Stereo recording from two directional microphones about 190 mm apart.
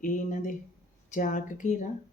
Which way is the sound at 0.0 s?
45° left (ahead or behind).